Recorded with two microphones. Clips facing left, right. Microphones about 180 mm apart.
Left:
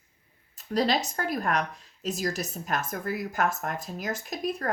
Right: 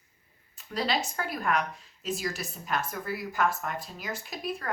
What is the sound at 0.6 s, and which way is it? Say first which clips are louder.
Speech: left 4 dB; 40° left (ahead or behind).